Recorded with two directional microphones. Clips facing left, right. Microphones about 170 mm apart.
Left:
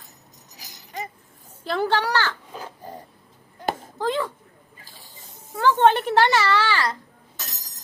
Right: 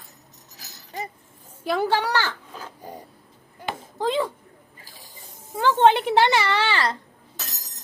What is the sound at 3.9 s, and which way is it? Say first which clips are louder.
Speech: right 3 dB; 15° right (ahead or behind).